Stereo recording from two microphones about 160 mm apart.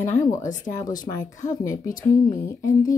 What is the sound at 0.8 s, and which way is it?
Speech, 25° left (ahead or behind).